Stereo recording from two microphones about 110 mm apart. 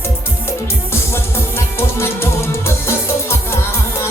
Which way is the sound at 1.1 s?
25° left (ahead or behind).